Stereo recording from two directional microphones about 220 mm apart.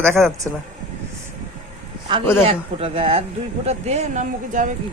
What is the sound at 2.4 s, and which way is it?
Speech, 25° right (ahead or behind).